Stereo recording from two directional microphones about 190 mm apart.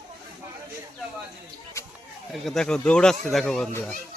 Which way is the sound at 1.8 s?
15° left (ahead or behind).